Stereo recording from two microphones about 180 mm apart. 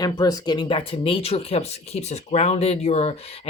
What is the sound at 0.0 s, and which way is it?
Speech, 20° left (ahead or behind).